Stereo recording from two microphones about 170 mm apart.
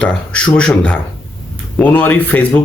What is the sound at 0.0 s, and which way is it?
Speech, 5° left (ahead or behind).